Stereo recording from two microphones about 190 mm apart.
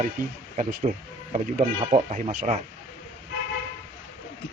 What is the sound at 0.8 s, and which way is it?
Speech, 35° right (ahead or behind).